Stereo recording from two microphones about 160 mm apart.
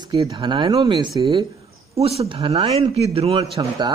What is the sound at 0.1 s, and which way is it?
A man's voice, 25° right (ahead or behind).